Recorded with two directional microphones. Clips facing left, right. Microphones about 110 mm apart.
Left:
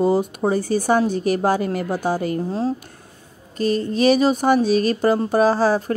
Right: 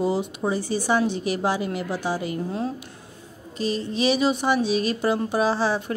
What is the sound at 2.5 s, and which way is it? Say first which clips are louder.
Speech: left 5 dB; 30° left (ahead or behind).